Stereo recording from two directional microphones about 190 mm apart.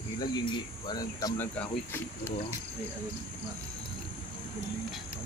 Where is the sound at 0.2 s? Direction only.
20° left (ahead or behind).